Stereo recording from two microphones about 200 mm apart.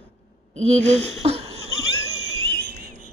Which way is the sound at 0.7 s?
30° right (ahead or behind).